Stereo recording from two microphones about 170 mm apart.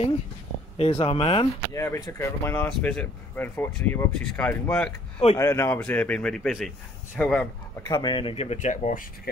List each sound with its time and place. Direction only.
0.7 s speech: 35° left (ahead or behind)
1.7 s speech: 15° left (ahead or behind)
7.9 s speech: 25° left (ahead or behind); by 9.0 s 50° left (ahead or behind)